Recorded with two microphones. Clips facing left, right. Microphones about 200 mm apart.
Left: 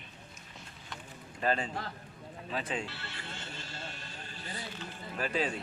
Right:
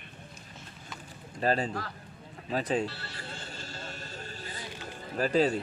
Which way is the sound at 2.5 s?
40° right (ahead or behind).